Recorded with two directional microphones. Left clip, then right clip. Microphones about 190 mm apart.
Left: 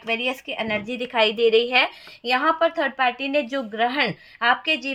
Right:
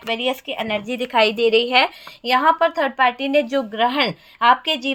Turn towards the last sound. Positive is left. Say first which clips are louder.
# right 4 dB
turn(degrees=-40)  # may be behind; listen again after turning